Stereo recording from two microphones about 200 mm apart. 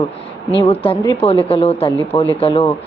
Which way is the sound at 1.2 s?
30° left (ahead or behind).